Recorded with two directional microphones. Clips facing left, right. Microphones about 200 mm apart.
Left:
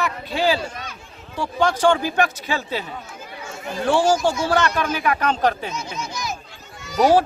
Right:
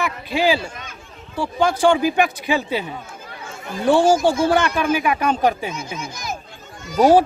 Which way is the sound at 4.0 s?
55° right (ahead or behind).